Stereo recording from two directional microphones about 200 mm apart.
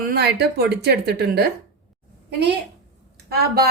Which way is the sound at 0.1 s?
55° right (ahead or behind).